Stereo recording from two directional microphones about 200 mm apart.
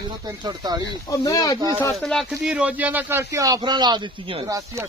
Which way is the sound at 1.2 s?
15° left (ahead or behind).